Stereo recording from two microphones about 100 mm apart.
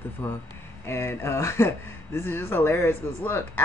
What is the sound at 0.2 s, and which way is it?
Speech, 25° left (ahead or behind).